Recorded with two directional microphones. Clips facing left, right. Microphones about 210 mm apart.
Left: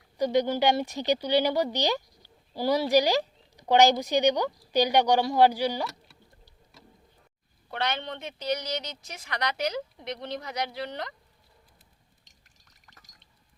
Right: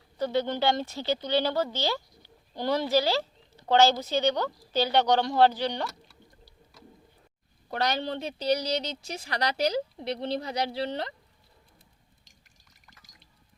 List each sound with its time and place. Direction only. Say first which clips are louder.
0.2 s a woman's voice: left 3 dB; 15° left (ahead or behind)
7.7 s a woman's voice: right 3 dB; 40° right (ahead or behind)